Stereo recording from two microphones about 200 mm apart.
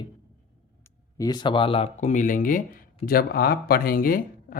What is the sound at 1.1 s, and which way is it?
Speech, 20° left (ahead or behind).